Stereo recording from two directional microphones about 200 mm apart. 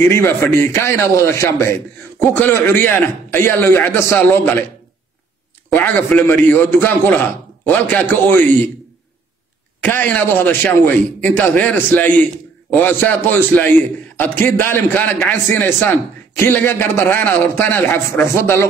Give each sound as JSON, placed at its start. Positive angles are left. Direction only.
{"t": 0.0, "sound": "a man's voice", "side_deg": 10}
{"t": 5.8, "sound": "a man's voice", "side_deg": 10}
{"t": 9.8, "sound": "a man's voice", "side_deg": 10}